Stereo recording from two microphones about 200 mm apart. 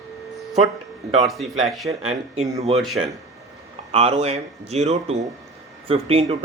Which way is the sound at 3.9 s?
30° right (ahead or behind).